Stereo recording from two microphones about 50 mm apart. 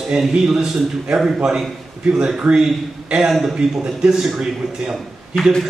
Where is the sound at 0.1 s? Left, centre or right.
Centre.